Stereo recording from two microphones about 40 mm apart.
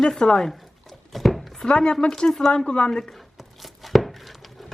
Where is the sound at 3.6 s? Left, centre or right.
Centre.